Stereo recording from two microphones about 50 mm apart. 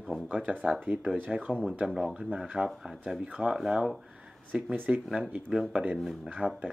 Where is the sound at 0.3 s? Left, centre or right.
Right.